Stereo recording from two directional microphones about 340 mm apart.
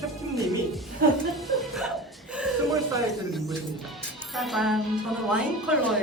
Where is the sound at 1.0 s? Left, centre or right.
Right.